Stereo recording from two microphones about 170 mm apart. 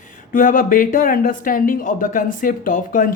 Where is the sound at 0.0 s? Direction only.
50° left (ahead or behind).